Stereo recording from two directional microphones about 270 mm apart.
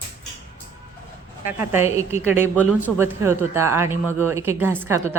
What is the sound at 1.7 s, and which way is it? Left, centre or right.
Speech, centre.